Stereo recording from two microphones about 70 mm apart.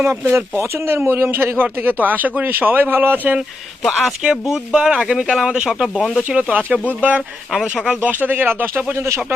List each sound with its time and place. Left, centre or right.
0.0 s a man's voice: right
4.2 s speech: centre
6.2 s speech: right
7.2 s speech: centre
8.1 s speech: right
9.0 s speech: right